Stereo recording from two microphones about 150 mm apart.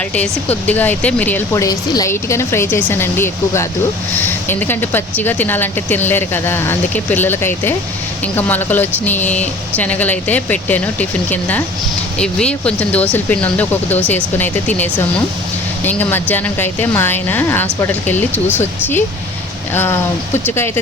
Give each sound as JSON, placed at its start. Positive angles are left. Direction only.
{"t": 0.1, "sound": "speech", "side_deg": 10}
{"t": 1.6, "sound": "speech", "side_deg": 25}